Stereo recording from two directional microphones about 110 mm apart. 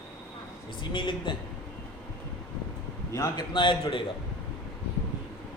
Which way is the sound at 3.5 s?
50° left (ahead or behind).